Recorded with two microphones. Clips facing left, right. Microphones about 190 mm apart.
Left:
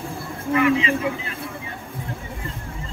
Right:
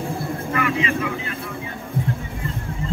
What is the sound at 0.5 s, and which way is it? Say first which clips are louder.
Speech: left 5 dB; 20° left (ahead or behind).